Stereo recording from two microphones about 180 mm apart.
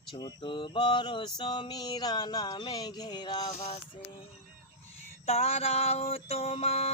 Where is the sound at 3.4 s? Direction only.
35° left (ahead or behind).